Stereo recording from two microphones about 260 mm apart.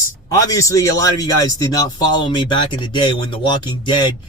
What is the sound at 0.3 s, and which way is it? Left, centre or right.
A man's voice, centre.